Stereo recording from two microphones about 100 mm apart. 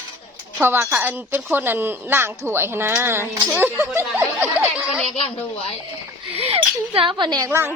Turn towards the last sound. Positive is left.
turn(degrees=-25)  # may be behind; listen again after turning